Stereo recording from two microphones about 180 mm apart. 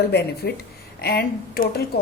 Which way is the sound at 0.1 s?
65° left (ahead or behind).